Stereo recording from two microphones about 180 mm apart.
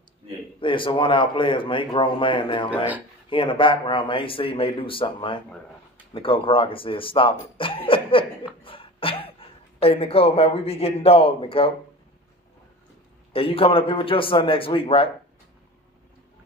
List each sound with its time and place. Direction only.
0.6 s speech: 30° left (ahead or behind)
13.3 s a man's voice: 30° left (ahead or behind)